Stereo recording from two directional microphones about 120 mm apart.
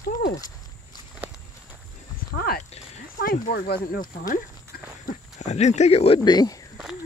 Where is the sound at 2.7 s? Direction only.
90° left.